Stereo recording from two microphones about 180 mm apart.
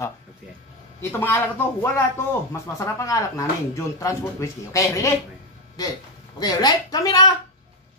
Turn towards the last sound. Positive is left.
turn(degrees=20)  # may be behind; listen again after turning